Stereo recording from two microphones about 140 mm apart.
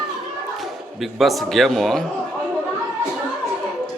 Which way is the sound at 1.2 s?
Centre (ahead or behind).